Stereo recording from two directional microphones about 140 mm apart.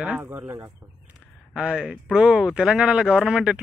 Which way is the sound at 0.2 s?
15° right (ahead or behind).